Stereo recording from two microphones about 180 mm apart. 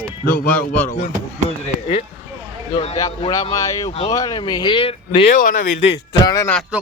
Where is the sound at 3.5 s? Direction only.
15° left (ahead or behind).